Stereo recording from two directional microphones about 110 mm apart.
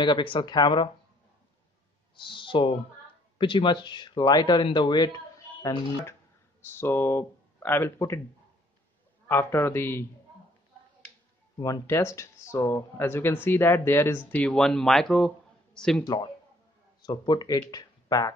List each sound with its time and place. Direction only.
0.0 s speech: 50° left (ahead or behind)
2.1 s speech: 50° left (ahead or behind)
6.6 s speech: 20° left (ahead or behind)
9.3 s speech: 20° left (ahead or behind)
11.6 s speech: 30° left (ahead or behind); by 16.0 s 5° left (ahead or behind)
17.0 s speech: 40° left (ahead or behind)